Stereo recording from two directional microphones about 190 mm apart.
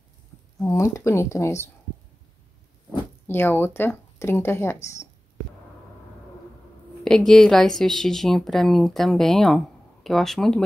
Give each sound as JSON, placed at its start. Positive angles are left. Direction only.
{"t": 0.7, "sound": "speech", "side_deg": 15}
{"t": 2.9, "sound": "speech", "side_deg": 10}
{"t": 7.1, "sound": "speech", "side_deg": 0}